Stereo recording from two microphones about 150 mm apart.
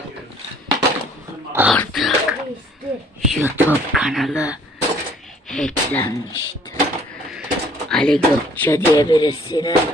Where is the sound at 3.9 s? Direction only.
Centre (ahead or behind).